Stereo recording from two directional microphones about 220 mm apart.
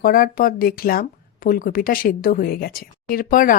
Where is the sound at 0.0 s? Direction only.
40° left (ahead or behind).